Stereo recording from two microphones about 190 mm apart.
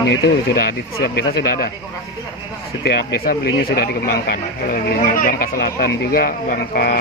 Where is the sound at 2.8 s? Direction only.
55° left (ahead or behind).